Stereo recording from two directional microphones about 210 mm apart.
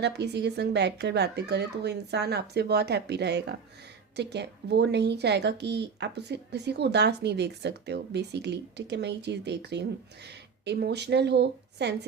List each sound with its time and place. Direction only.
0.0 s speech: 55° right (ahead or behind)